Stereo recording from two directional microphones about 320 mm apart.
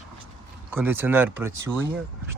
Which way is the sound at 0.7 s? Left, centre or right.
Centre.